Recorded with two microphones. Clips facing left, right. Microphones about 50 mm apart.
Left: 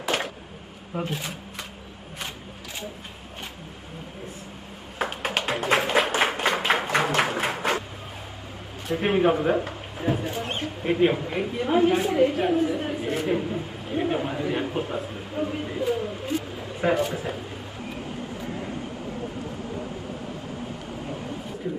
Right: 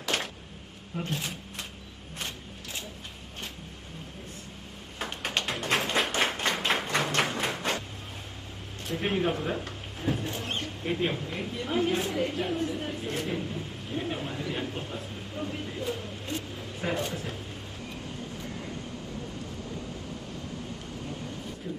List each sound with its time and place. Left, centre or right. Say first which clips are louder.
0.1 s a sound: left 3 dB; centre
0.9 s a man's voice: left 6 dB; centre
4.9 s tap: left 5 dB; centre
8.9 s a man's voice: left 7 dB; centre